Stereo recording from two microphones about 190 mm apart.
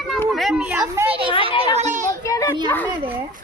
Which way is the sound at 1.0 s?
30° right (ahead or behind).